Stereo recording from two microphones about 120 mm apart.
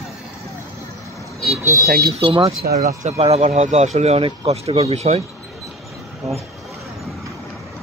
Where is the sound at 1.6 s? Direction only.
25° right (ahead or behind).